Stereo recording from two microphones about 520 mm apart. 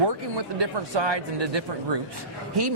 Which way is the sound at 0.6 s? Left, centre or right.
Right.